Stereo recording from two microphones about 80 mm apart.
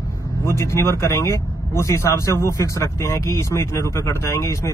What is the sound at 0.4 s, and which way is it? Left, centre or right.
Speech, left.